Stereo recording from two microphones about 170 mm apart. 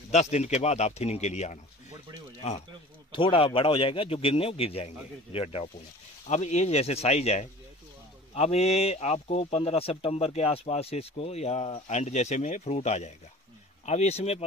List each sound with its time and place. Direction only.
0.1 s speech: 40° left (ahead or behind)
3.1 s speech: 30° left (ahead or behind)